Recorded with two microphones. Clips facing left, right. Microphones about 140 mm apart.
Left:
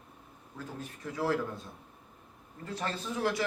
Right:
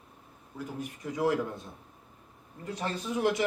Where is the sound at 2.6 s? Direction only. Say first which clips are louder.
Right 2 dB; 15° right (ahead or behind).